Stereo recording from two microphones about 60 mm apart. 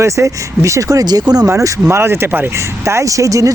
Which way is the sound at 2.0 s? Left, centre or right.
Right.